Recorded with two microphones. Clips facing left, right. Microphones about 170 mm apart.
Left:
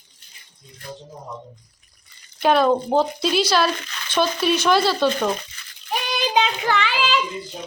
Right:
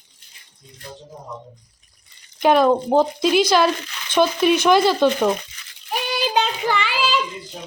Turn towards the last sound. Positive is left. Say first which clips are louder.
# even
turn(degrees=-10)  # may be behind; listen again after turning